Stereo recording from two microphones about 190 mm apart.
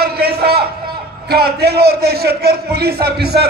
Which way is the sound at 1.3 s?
55° right (ahead or behind).